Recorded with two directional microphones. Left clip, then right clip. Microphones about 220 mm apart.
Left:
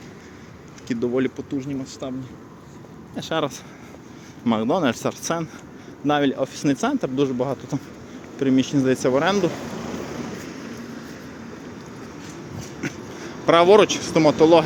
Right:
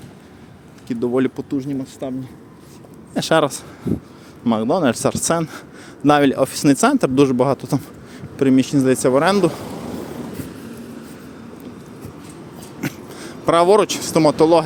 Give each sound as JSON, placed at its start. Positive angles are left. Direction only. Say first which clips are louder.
{"t": 0.9, "sound": "speech", "louder": "right 3 dB", "side_deg": -20}
{"t": 2.0, "sound": "speech", "louder": "right 4 dB", "side_deg": -40}
{"t": 4.4, "sound": "speech", "louder": "right 3 dB", "side_deg": -15}
{"t": 8.4, "sound": "speech", "louder": "right 4 dB", "side_deg": -30}
{"t": 12.8, "sound": "speech", "louder": "right 3 dB", "side_deg": -25}